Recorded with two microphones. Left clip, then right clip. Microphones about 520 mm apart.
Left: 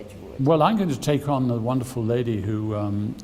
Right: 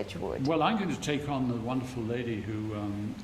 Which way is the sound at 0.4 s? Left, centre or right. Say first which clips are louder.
Left 9 dB; left.